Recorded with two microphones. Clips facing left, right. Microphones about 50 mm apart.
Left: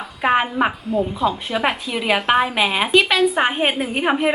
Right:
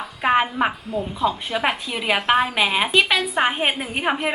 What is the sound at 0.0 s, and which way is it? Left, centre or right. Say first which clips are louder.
A woman's voice: left 1 dB; centre.